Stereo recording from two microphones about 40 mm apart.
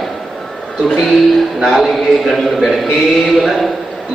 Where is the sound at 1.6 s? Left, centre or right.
Centre.